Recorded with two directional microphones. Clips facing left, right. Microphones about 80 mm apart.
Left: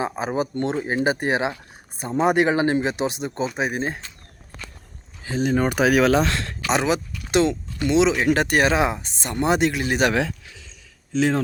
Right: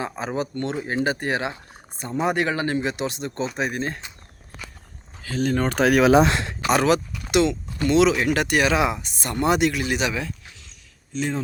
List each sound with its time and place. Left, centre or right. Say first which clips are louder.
0.0 s speech: left 3 dB; centre
5.2 s speech: left 2 dB; centre
6.1 s a sound: right 3 dB; centre
6.7 s speech: right 2 dB; centre
7.3 s speech: even; left
7.9 s speech: right 1 dB; left
8.2 s speech: left 2 dB; left